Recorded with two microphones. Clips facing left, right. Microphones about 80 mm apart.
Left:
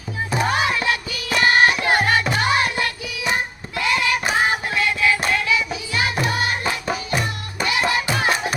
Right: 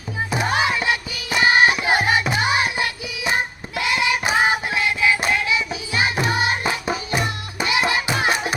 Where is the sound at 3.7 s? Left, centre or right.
Centre.